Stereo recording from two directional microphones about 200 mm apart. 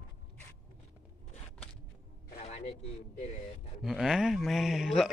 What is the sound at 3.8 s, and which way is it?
Speech, centre (ahead or behind).